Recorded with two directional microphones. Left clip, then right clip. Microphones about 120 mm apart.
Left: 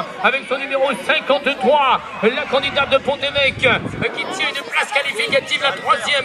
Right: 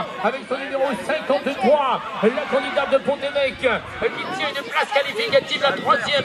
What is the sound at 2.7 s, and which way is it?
Speech, 25° left (ahead or behind).